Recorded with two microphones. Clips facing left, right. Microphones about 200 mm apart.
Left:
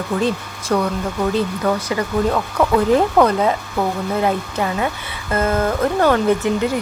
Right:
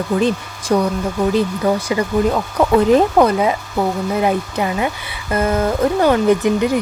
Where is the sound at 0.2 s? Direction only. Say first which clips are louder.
Right 3 dB; 20° right (ahead or behind).